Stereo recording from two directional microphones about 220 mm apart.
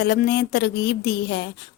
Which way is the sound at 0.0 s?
45° left (ahead or behind).